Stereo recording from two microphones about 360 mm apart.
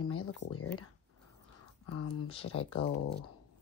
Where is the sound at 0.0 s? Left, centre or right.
Left.